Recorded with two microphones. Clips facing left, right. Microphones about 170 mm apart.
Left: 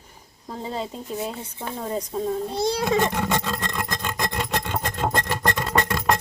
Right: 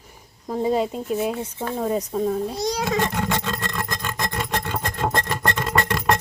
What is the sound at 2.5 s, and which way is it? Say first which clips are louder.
Speech: left 2 dB; 25° left (ahead or behind).